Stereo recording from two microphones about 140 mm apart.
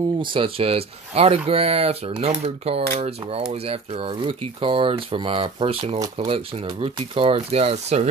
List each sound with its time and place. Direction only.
0.2 s speech: 40° right (ahead or behind)